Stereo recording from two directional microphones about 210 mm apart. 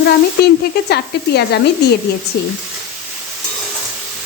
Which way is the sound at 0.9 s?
50° left (ahead or behind).